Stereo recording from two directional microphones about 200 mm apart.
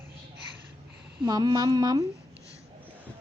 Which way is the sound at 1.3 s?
20° right (ahead or behind).